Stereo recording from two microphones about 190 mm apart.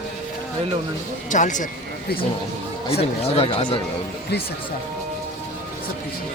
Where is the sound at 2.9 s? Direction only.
30° left (ahead or behind).